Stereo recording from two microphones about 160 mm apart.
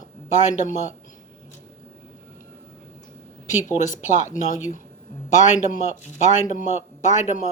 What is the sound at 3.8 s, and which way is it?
Speech, 50° left (ahead or behind).